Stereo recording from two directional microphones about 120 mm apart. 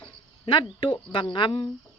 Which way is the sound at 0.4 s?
40° left (ahead or behind).